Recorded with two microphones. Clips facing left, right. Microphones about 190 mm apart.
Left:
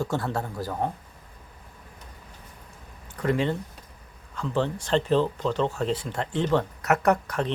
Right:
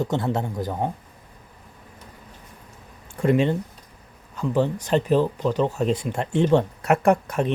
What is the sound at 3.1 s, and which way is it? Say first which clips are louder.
Speech: right 5 dB; 25° right (ahead or behind).